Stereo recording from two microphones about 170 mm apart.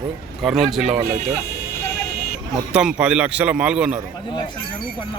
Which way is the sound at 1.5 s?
75° left (ahead or behind).